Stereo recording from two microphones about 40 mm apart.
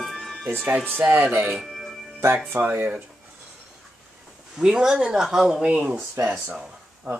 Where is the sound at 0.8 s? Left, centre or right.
Right.